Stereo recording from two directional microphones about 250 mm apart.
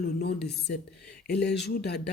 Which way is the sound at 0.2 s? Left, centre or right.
Left.